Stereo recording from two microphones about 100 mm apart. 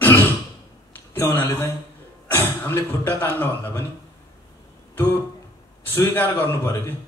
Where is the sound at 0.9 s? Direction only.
25° left (ahead or behind).